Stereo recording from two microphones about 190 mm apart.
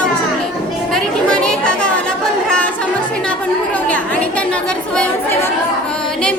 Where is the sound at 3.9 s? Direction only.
5° left (ahead or behind).